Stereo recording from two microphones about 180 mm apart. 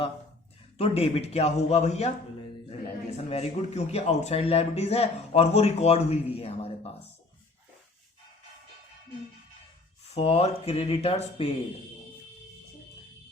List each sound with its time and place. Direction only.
0.8 s speech: 35° left (ahead or behind)
3.2 s speech: 35° left (ahead or behind)
10.1 s speech: 35° left (ahead or behind)